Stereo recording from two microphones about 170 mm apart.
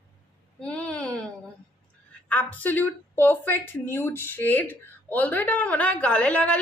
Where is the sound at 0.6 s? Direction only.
5° left (ahead or behind).